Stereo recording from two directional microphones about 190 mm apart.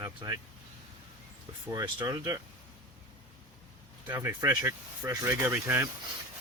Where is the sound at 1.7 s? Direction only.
20° right (ahead or behind).